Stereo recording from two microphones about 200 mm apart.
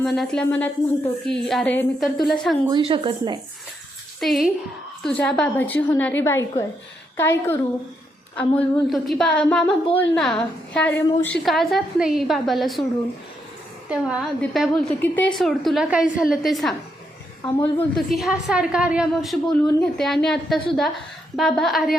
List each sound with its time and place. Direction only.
0.0 s a woman's voice: centre (ahead or behind)
2.6 s a woman's voice: 25° right (ahead or behind)
4.2 s a woman's voice: centre (ahead or behind)
13.9 s a woman's voice: 5° right (ahead or behind)